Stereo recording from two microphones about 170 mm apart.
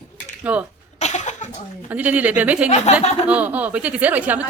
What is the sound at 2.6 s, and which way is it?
Speech, 40° left (ahead or behind).